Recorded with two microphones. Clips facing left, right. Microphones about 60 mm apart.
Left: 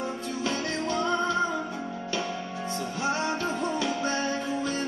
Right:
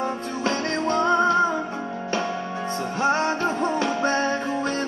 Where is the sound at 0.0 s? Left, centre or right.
Right.